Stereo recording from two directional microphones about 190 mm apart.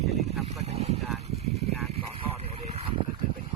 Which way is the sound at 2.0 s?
25° right (ahead or behind).